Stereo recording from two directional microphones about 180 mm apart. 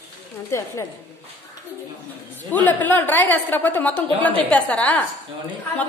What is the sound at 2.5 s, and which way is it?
A woman's voice, 10° left (ahead or behind).